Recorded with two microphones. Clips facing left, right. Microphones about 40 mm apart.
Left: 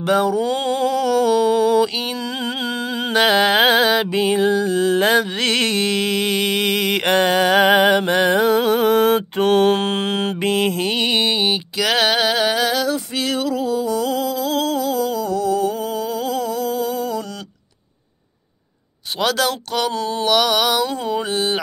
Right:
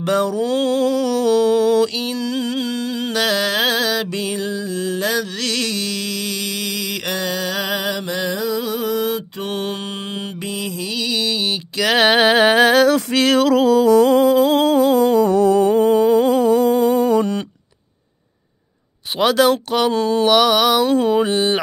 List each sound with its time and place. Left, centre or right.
0.0 s mantra: centre; by 11.5 s left
12.0 s singing: right
12.8 s a sound: right
13.9 s humming: right
19.1 s speech: centre
20.1 s mantra: centre
21.1 s speech: centre